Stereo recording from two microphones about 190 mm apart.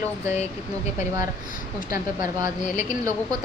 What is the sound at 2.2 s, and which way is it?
Speech, 40° left (ahead or behind).